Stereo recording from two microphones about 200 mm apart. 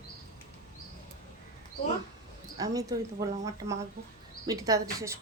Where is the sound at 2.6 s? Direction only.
15° right (ahead or behind).